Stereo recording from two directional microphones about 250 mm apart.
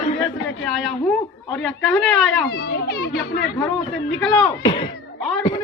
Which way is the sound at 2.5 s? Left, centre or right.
Left.